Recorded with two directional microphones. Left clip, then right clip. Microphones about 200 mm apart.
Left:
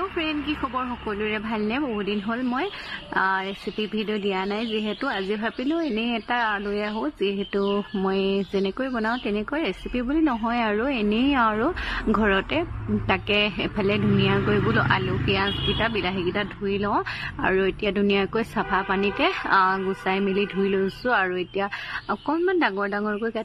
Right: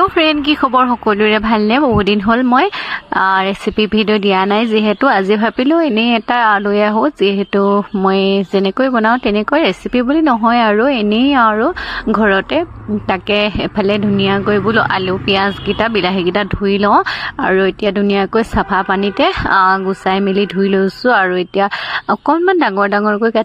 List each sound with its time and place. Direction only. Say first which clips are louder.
0.0 s a man's voice: right 15 dB; 50° right (ahead or behind)